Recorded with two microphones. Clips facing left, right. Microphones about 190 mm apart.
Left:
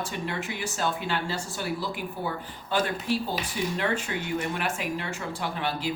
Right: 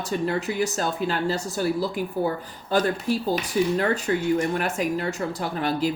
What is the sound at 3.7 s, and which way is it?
Speech, 40° right (ahead or behind).